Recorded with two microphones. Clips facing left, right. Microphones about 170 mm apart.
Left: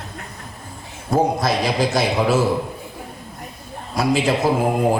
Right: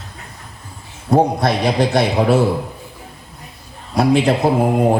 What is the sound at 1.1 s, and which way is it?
A man's voice, 60° right (ahead or behind).